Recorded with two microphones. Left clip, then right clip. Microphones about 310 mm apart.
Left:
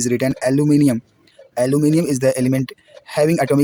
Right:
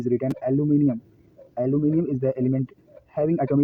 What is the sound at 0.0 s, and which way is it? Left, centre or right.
Speech, left.